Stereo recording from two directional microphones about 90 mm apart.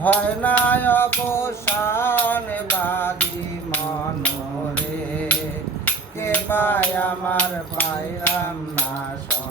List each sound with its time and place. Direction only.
0.0 s music: 15° left (ahead or behind)
5.8 s music: 20° left (ahead or behind)